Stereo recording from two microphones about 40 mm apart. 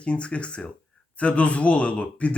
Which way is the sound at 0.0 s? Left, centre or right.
Left.